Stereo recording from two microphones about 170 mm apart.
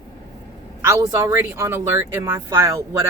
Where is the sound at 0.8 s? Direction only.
15° right (ahead or behind).